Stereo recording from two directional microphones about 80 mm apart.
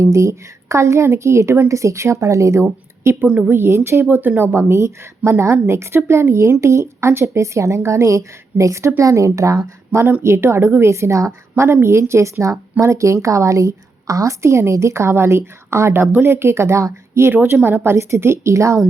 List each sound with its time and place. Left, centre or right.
0.0 s a woman's voice: right
3.2 s a woman's voice: centre
3.5 s a woman's voice: right